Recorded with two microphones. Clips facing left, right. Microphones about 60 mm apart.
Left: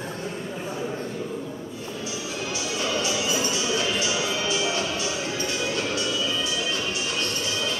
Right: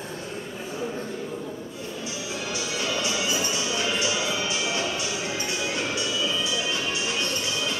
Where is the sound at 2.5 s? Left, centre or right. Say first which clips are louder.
Left 2 dB; right.